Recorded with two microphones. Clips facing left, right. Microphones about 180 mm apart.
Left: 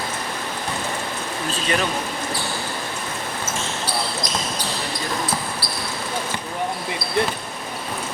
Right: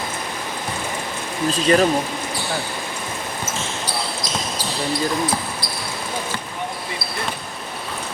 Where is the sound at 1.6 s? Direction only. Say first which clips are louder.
Right 8 dB; 40° right (ahead or behind).